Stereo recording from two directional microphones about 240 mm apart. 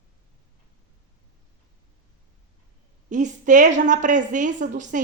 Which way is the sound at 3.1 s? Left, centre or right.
Right.